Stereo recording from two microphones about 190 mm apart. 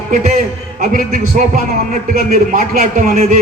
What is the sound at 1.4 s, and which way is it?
A man's voice, 40° right (ahead or behind).